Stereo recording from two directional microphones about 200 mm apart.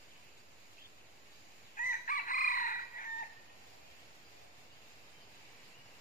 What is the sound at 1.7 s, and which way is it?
Chicken, 45° left (ahead or behind).